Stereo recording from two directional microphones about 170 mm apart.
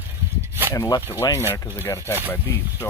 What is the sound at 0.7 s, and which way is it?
Speech, 15° left (ahead or behind).